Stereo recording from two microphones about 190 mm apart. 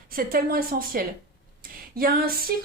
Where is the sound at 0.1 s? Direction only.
50° right (ahead or behind).